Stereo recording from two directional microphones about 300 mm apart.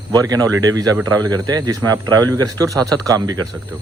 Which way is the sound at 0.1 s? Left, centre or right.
Centre.